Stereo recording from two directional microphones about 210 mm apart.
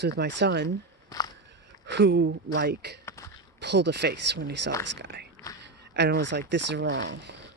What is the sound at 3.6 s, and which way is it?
Speech, 55° right (ahead or behind).